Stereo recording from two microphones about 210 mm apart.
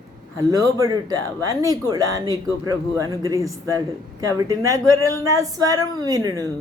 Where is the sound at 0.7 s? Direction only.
15° right (ahead or behind).